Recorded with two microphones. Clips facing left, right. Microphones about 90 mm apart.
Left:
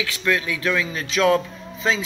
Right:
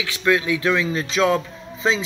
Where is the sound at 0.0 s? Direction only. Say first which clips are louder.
Right 3 dB; 20° right (ahead or behind).